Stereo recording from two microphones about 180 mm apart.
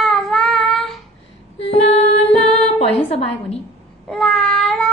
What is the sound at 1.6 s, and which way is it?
Female singing, 35° left (ahead or behind).